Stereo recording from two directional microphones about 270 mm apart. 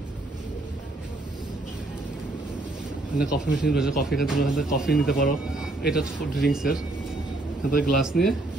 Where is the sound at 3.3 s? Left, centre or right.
Left.